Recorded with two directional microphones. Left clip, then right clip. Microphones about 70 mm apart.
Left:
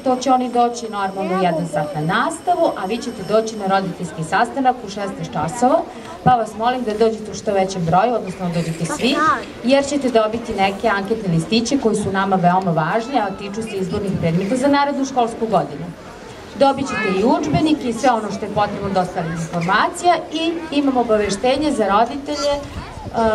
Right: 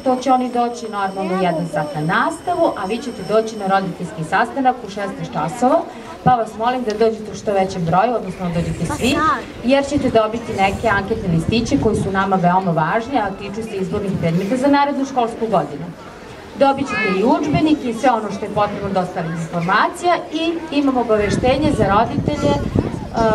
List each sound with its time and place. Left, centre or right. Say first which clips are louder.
0.0 s a woman's voice: right 1 dB; left
9.1 s a woman's voice: even; right
9.7 s a woman's voice: even; left
16.8 s speech: right 2 dB; right
17.2 s a woman's voice: even; left
22.3 s speech: right 1 dB; left